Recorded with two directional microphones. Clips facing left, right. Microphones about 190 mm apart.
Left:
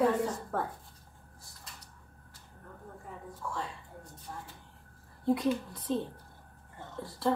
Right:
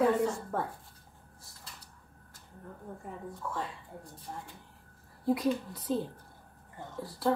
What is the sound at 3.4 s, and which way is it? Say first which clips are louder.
Speech: even; 5° right (ahead or behind).